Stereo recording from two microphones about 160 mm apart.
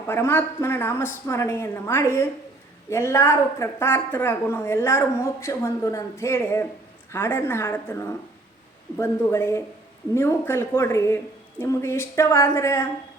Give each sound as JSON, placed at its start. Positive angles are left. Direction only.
{"t": 0.1, "sound": "a woman's voice", "side_deg": 15}